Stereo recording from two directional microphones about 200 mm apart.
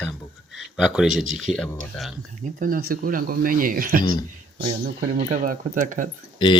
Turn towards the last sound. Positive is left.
turn(degrees=25)  # may be behind; listen again after turning